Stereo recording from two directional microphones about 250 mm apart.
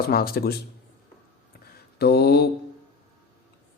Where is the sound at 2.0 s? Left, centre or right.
Left.